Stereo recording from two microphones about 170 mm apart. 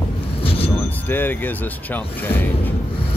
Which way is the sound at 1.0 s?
10° left (ahead or behind).